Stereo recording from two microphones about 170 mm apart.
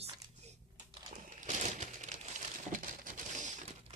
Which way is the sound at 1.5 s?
45° right (ahead or behind).